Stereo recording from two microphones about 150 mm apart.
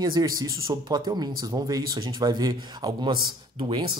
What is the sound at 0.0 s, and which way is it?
Speech, 25° right (ahead or behind).